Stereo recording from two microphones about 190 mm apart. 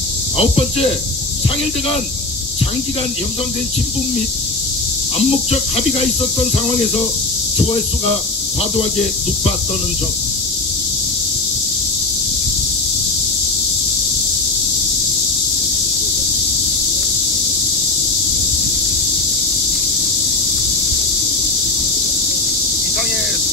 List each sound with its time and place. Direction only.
0.4 s speech: 30° left (ahead or behind)